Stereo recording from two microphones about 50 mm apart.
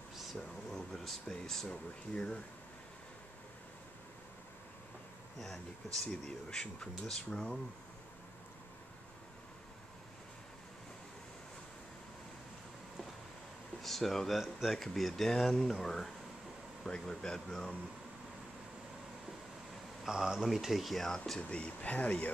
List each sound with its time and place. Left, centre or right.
0.1 s a sound: centre
0.7 s speech: centre
5.9 s speech: centre
13.8 s speech: centre
20.1 s speech: centre
20.4 s speech: centre
21.4 s speech: left